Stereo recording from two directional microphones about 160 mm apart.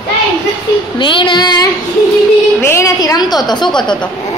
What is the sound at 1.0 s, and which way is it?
Speech, 30° left (ahead or behind).